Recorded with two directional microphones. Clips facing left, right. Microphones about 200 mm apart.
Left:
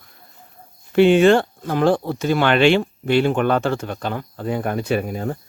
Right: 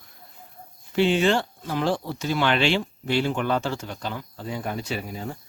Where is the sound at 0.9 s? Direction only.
55° left (ahead or behind).